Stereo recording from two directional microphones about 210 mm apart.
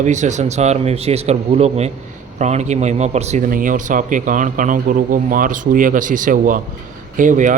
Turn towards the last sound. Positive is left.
turn(degrees=-40)  # may be behind; listen again after turning